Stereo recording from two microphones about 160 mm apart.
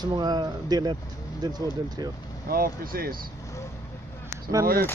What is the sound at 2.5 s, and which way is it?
Speech, 65° right (ahead or behind).